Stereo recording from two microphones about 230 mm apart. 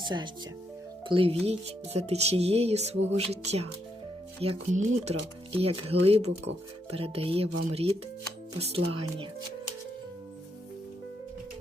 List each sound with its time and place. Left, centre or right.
0.0 s speech: centre
1.0 s music: right